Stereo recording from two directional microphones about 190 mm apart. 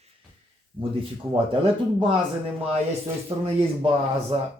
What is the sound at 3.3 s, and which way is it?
Speech, 30° right (ahead or behind).